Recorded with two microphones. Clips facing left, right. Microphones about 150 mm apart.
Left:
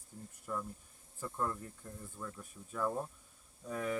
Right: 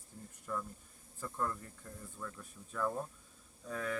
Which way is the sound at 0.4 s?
10° left (ahead or behind).